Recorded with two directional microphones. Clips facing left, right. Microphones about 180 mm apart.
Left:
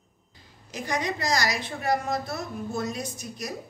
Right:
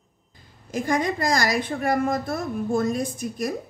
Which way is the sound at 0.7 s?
50° right (ahead or behind).